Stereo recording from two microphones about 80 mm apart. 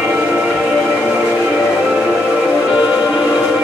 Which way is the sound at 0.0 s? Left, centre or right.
Centre.